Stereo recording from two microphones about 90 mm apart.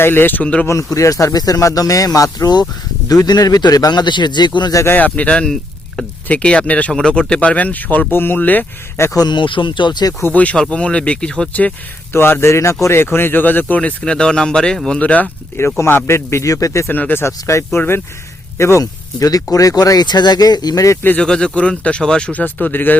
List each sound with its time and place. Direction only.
0.0 s speech: 25° left (ahead or behind)
0.7 s speech: 35° left (ahead or behind); by 4.7 s 55° left (ahead or behind)
4.7 s speech: 35° left (ahead or behind)
4.9 s speech: 15° left (ahead or behind)
9.1 s speech: 55° left (ahead or behind)
10.3 s speech: 15° left (ahead or behind)
12.1 s speech: 25° left (ahead or behind)
15.8 s speech: 30° left (ahead or behind)
16.9 s speech: 20° left (ahead or behind)
17.2 s speech: 30° left (ahead or behind)
21.2 s speech: 10° left (ahead or behind)